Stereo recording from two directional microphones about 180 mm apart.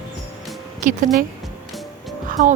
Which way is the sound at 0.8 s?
45° right (ahead or behind).